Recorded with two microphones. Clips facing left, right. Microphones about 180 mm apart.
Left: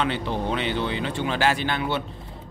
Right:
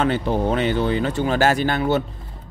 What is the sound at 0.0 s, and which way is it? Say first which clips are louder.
Speech: right 6 dB; 45° right (ahead or behind).